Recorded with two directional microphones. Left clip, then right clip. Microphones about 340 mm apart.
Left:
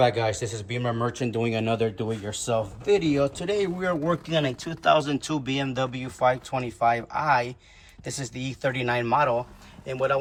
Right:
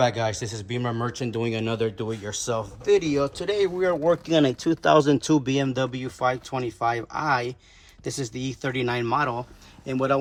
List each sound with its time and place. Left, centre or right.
0.0 s speech: centre
2.6 s speech: centre
3.0 s speech: centre